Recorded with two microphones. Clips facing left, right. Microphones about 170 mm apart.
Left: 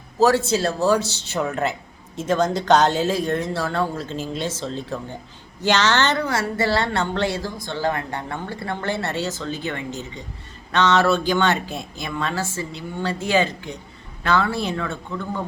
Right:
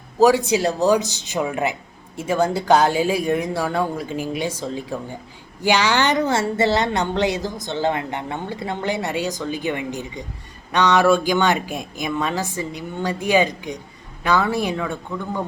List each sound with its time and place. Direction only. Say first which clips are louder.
0.2 s a woman's voice: right 2 dB; 15° right (ahead or behind)
6.2 s a woman's voice: right 3 dB; 25° right (ahead or behind)